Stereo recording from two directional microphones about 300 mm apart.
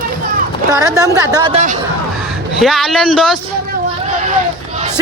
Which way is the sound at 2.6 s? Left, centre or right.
Centre.